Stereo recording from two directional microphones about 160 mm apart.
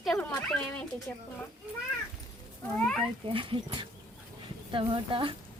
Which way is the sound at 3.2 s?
30° right (ahead or behind).